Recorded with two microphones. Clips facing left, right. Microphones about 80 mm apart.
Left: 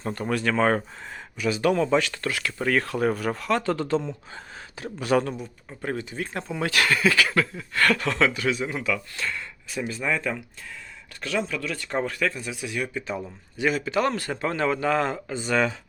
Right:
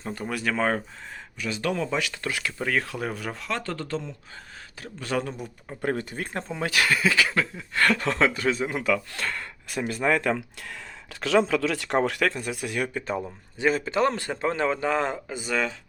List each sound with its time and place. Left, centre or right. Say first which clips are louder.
0.1 s speech: left 3 dB; centre
2.2 s a man's voice: left 2 dB; centre
2.6 s speech: left 6 dB; centre
3.7 s speech: left 6 dB; centre
5.8 s speech: right 2 dB; right
6.3 s speech: left 1 dB; right
11.2 s speech: right 6 dB; right
13.2 s a man's voice: even; right
15.4 s speech: left 4 dB; centre